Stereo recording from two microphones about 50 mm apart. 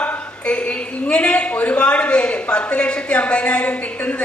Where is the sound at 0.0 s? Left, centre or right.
Left.